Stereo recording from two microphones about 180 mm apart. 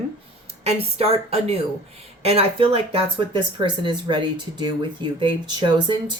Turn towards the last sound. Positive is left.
turn(degrees=-25)  # may be behind; listen again after turning